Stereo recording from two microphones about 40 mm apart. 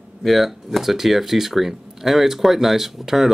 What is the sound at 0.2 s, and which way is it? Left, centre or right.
Speech, centre.